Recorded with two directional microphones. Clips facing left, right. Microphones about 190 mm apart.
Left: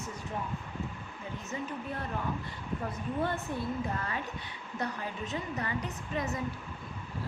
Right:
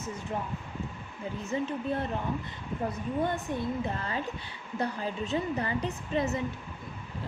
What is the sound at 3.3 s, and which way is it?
A woman's voice, 25° right (ahead or behind).